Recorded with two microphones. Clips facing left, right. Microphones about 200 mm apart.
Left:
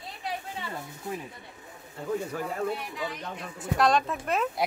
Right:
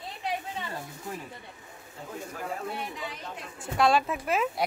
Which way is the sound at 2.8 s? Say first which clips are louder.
Left 3 dB; centre (ahead or behind).